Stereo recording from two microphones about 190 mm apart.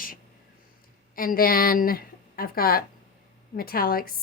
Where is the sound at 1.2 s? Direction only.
50° left (ahead or behind).